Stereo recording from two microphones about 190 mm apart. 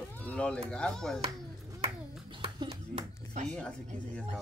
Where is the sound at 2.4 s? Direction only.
30° right (ahead or behind).